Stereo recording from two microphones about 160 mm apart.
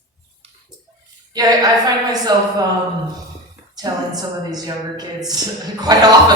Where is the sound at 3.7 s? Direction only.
25° right (ahead or behind).